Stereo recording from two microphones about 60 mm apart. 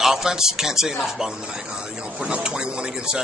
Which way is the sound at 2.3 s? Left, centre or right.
Centre.